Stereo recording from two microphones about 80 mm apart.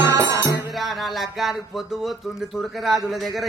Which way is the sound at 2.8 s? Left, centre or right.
Centre.